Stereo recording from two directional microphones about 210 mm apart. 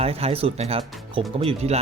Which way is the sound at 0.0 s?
30° right (ahead or behind).